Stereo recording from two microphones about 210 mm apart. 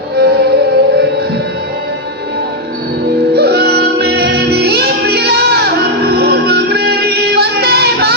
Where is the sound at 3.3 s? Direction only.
50° right (ahead or behind).